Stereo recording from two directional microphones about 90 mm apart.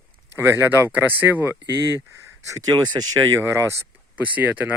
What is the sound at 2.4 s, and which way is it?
Speech, 40° right (ahead or behind).